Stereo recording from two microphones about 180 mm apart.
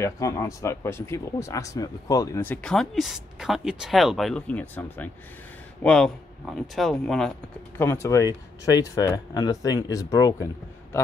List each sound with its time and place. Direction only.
0.0 s speech: 15° left (ahead or behind)